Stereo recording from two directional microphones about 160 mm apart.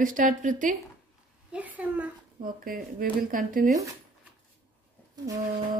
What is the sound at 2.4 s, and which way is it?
Speech, 60° right (ahead or behind).